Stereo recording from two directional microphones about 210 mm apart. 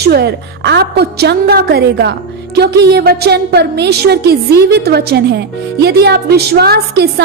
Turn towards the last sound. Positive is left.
turn(degrees=-50)  # may be behind; listen again after turning